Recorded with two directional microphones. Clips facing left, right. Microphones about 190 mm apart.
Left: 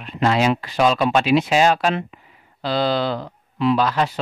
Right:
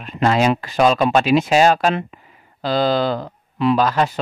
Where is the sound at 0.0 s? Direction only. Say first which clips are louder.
Right 2 dB; 45° right (ahead or behind).